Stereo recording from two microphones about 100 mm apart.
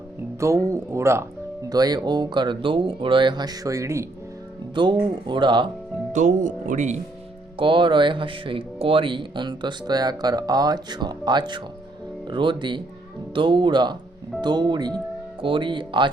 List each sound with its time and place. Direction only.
0.3 s speech: 30° right (ahead or behind)
1.7 s speech: 40° right (ahead or behind)
4.7 s speech: 50° right (ahead or behind)
7.6 s speech: 55° right (ahead or behind)
15.4 s speech: 55° right (ahead or behind)